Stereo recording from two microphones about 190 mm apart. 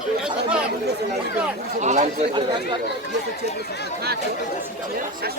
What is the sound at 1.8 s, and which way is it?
Speech, 40° right (ahead or behind).